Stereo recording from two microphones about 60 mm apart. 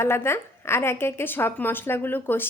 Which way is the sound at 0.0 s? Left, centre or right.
Left.